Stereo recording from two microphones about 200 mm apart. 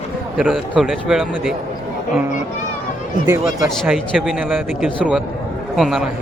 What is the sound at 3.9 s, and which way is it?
A man's voice, 5° right (ahead or behind).